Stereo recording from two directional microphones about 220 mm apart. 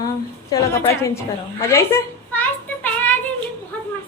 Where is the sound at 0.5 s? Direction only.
15° left (ahead or behind).